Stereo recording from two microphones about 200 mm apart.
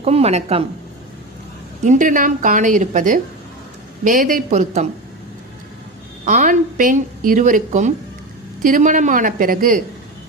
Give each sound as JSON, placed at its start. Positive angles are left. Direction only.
{"t": 0.0, "sound": "a woman's voice", "side_deg": -30}
{"t": 1.8, "sound": "a woman's voice", "side_deg": -40}
{"t": 6.2, "sound": "a woman's voice", "side_deg": -40}